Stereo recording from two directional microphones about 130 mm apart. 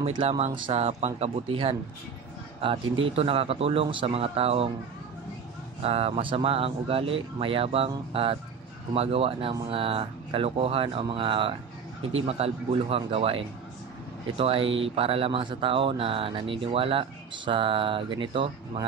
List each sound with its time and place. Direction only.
0.0 s speech: 50° right (ahead or behind)
5.8 s speech: 50° right (ahead or behind)